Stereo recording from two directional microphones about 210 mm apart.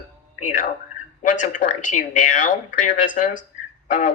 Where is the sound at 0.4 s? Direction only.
40° left (ahead or behind).